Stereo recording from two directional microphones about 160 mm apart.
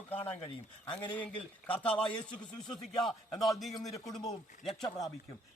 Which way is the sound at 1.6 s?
10° left (ahead or behind).